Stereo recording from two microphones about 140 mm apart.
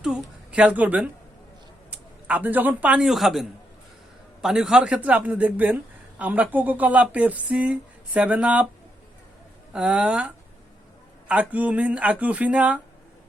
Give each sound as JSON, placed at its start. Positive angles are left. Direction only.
{"t": 0.0, "sound": "a sound", "side_deg": -5}
{"t": 1.9, "sound": "a man's voice", "side_deg": -10}
{"t": 9.7, "sound": "speech", "side_deg": -10}